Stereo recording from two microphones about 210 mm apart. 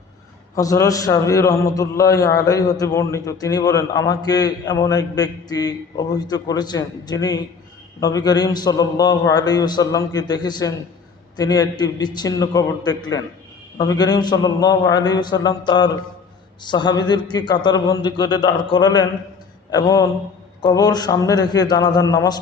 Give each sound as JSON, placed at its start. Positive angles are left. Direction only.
{"t": 0.5, "sound": "a man's voice", "side_deg": 15}